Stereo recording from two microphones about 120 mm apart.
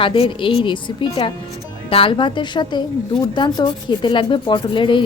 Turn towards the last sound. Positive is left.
turn(degrees=45)  # may be behind; listen again after turning